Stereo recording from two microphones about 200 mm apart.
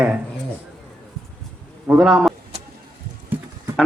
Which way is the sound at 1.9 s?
5° right (ahead or behind).